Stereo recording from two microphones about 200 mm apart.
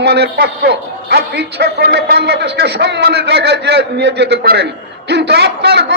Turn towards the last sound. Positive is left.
turn(degrees=-55)  # may be behind; listen again after turning